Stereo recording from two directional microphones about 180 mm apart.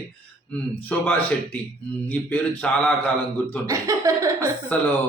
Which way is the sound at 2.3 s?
5° left (ahead or behind).